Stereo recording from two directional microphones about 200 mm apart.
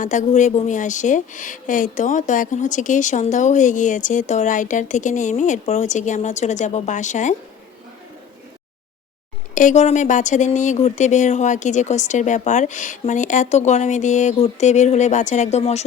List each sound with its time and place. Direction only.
0.0 s a woman's voice: 40° left (ahead or behind)
9.6 s a woman's voice: 35° left (ahead or behind)